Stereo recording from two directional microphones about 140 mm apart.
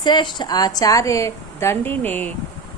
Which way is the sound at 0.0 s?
30° left (ahead or behind).